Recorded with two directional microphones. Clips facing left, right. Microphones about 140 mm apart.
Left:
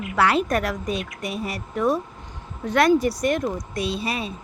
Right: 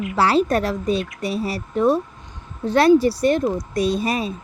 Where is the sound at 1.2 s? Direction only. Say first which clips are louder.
Right 5 dB; 30° right (ahead or behind).